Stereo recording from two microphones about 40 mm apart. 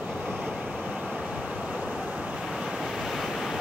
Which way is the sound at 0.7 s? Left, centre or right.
Centre.